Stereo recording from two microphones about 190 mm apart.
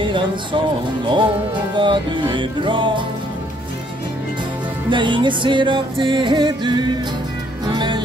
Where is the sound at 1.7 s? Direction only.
25° right (ahead or behind).